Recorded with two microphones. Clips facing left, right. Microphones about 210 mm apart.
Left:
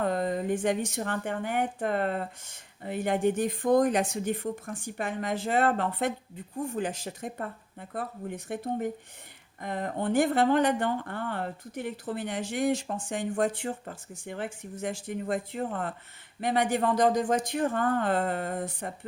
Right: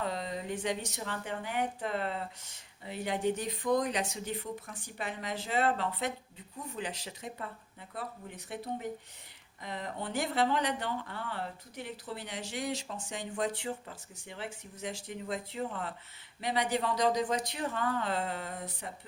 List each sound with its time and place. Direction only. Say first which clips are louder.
0.0 s speech: left 8 dB; 50° left (ahead or behind)